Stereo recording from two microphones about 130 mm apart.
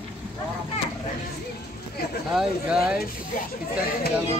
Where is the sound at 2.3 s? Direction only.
5° right (ahead or behind).